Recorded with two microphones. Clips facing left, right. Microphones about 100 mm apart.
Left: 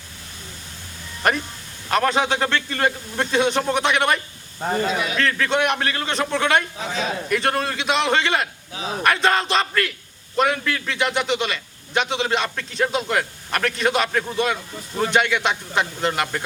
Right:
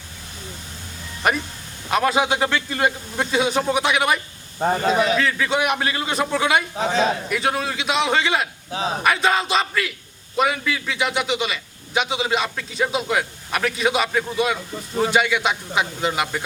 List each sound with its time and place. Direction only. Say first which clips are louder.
1.2 s a man's voice: even; 5° right (ahead or behind)
4.6 s speech: right 4 dB; 35° right (ahead or behind)
5.1 s a man's voice: even; 5° right (ahead or behind)
6.7 s speech: right 6 dB; 35° right (ahead or behind)
7.3 s a man's voice: left 1 dB; 5° right (ahead or behind)